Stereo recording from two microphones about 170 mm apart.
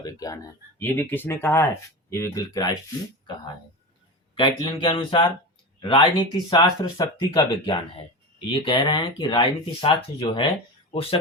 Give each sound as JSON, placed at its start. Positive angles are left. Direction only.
{"t": 0.0, "sound": "speech", "side_deg": 20}
{"t": 0.8, "sound": "speech", "side_deg": 10}